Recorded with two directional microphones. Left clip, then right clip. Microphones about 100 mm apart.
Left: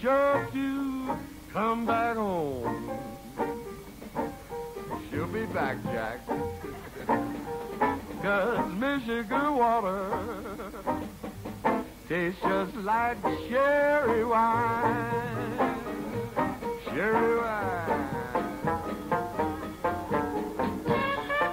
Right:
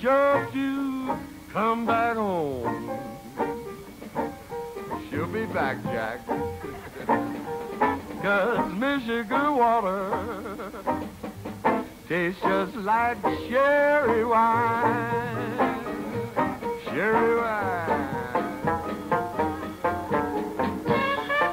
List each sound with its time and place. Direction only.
0.0 s music: 30° left (ahead or behind)
4.9 s music: 35° left (ahead or behind)